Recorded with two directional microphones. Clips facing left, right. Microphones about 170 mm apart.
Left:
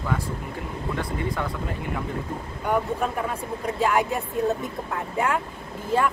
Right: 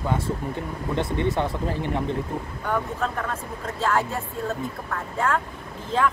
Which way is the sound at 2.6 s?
15° left (ahead or behind).